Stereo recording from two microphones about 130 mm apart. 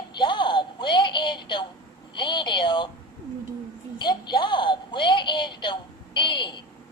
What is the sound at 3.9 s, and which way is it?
Speech, 35° left (ahead or behind).